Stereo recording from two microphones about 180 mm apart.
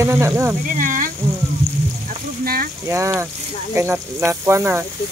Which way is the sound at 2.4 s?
55° right (ahead or behind).